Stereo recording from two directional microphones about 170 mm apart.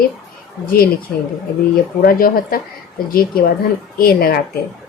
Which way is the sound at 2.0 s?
60° left (ahead or behind).